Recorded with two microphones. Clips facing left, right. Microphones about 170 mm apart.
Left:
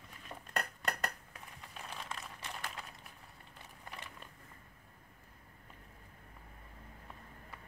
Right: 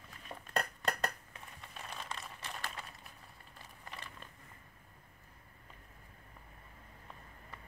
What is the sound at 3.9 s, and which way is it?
Biting, 15° left (ahead or behind).